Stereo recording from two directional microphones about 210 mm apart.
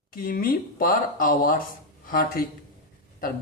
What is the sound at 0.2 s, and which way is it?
Speech, 45° left (ahead or behind).